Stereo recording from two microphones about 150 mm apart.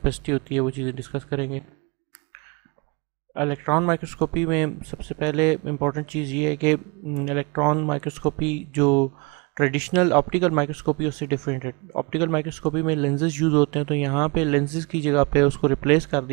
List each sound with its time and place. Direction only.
0.0 s speech: 5° right (ahead or behind)
3.3 s speech: 5° right (ahead or behind)